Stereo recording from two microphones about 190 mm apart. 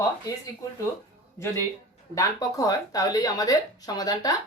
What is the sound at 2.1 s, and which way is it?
Speech, 20° left (ahead or behind).